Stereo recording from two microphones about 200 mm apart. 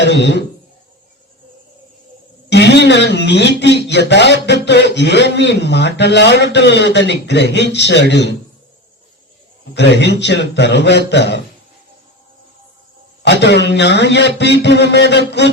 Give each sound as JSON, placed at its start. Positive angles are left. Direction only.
{"t": 0.0, "sound": "a man's voice", "side_deg": 60}
{"t": 2.5, "sound": "a man's voice", "side_deg": 60}
{"t": 9.7, "sound": "a man's voice", "side_deg": 60}
{"t": 13.4, "sound": "a man's voice", "side_deg": 60}